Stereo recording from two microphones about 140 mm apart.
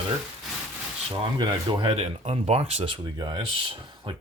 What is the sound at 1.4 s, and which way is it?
Speech, 35° right (ahead or behind).